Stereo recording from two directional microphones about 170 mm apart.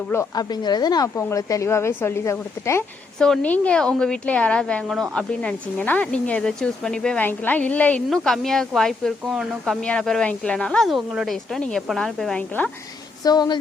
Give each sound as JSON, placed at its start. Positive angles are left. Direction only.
{"t": 0.1, "sound": "speech", "side_deg": 20}
{"t": 3.2, "sound": "a woman's voice", "side_deg": 5}
{"t": 13.2, "sound": "a woman's voice", "side_deg": 25}